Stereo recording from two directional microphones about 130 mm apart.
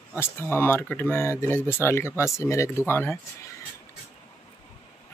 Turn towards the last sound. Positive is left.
turn(degrees=15)  # may be behind; listen again after turning